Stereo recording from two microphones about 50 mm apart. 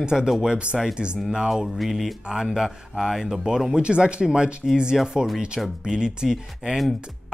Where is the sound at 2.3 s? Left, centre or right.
Centre.